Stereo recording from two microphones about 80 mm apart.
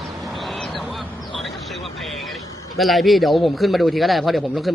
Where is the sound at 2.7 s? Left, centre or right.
Centre.